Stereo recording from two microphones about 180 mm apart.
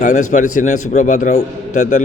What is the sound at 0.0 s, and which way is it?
A man's voice, 45° left (ahead or behind).